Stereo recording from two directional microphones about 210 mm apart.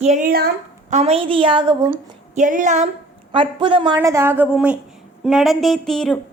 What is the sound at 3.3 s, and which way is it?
Speech, 25° right (ahead or behind).